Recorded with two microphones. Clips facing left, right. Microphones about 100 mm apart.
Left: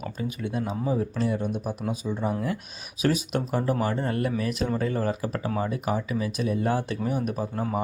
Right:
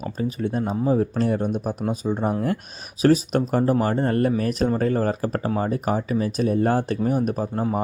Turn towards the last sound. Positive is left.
turn(degrees=-40)  # may be behind; listen again after turning